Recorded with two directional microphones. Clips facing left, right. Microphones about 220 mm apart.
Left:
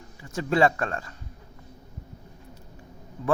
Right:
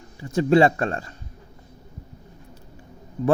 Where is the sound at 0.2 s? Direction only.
30° right (ahead or behind).